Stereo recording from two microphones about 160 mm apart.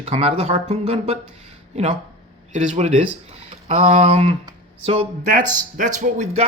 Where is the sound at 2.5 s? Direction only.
45° right (ahead or behind).